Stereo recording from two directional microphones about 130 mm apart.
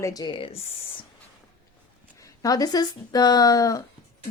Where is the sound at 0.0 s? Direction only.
30° left (ahead or behind).